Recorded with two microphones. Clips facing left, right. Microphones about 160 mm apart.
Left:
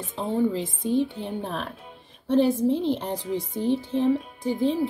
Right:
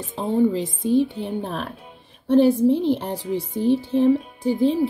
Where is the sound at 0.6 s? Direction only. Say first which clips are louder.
Right 4 dB; 10° right (ahead or behind).